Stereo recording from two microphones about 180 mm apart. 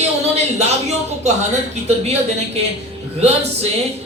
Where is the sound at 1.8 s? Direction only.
35° right (ahead or behind).